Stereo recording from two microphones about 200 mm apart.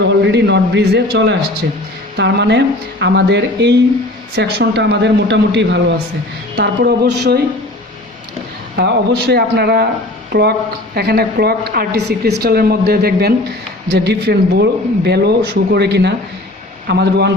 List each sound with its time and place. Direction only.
0.0 s a man's voice: 60° right (ahead or behind)
8.7 s a woman's voice: 55° right (ahead or behind)